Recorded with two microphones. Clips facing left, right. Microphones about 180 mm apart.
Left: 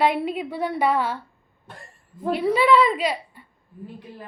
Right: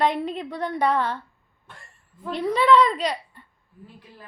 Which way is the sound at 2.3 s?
10° left (ahead or behind).